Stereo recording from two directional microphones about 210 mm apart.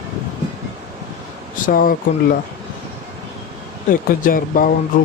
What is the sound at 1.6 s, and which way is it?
Speech, 40° left (ahead or behind).